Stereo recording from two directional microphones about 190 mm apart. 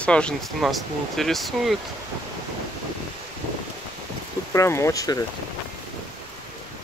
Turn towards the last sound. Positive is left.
turn(degrees=20)  # may be behind; listen again after turning